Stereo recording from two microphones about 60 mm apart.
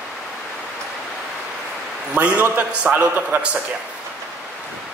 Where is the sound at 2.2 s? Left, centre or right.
Right.